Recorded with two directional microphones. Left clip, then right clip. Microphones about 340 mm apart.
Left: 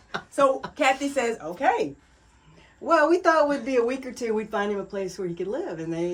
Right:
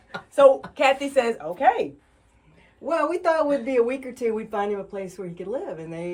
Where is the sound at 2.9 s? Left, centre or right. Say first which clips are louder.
Left 3 dB; centre.